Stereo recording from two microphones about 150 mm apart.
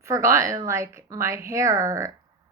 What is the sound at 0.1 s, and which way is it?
A woman's voice, 20° right (ahead or behind).